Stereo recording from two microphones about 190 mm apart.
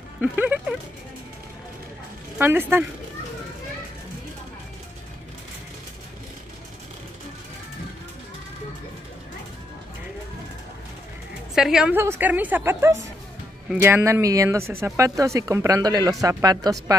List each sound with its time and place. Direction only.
0.2 s speech: 10° right (ahead or behind)
2.3 s speech: 10° right (ahead or behind)
11.5 s speech: 5° right (ahead or behind)